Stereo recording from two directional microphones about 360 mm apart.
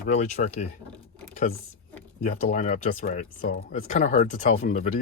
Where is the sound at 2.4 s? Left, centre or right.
Left.